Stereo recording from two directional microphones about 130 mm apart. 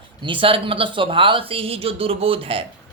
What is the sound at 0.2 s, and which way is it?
Speech, 40° right (ahead or behind).